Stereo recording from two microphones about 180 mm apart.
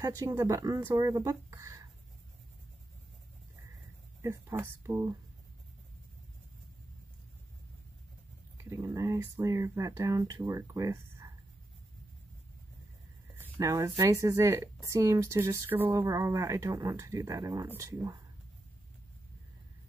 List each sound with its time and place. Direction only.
0.0 s speech: 20° right (ahead or behind)
4.2 s speech: 15° right (ahead or behind)
8.6 s speech: 15° right (ahead or behind)
13.4 s speech: 15° right (ahead or behind)